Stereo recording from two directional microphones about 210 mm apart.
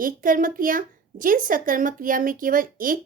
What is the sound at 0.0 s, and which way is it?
A woman's voice, 40° right (ahead or behind).